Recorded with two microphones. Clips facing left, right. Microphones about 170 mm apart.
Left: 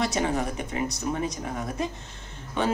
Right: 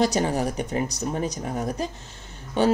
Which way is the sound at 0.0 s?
35° right (ahead or behind).